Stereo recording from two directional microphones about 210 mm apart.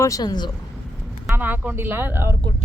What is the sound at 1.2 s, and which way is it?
Speech, 10° right (ahead or behind).